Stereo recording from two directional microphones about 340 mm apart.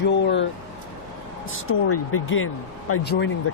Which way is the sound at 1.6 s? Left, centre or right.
Left.